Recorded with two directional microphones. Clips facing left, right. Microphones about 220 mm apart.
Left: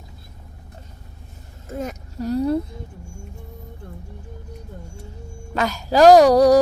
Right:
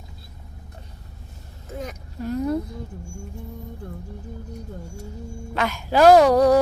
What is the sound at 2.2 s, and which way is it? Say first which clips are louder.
Speech: left 3 dB; 35° left (ahead or behind).